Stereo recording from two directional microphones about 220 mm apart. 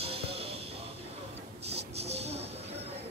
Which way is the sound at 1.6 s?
30° right (ahead or behind).